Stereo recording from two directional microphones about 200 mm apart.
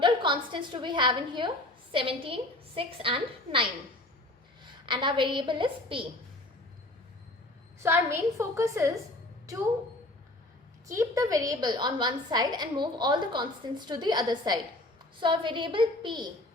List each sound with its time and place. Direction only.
0.0 s a woman's voice: 25° right (ahead or behind)
7.8 s a woman's voice: 10° right (ahead or behind)
10.8 s a woman's voice: 15° right (ahead or behind)